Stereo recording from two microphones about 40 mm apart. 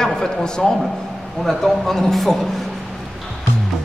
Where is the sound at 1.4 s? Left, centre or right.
Centre.